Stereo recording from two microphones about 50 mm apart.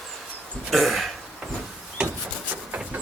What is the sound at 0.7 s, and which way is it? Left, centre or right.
Speech, centre.